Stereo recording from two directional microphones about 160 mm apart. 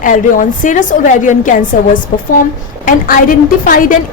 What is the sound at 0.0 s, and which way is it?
A woman's voice, 55° left (ahead or behind).